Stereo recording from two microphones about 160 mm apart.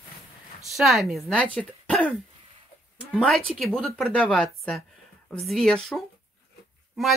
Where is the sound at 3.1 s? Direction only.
5° left (ahead or behind).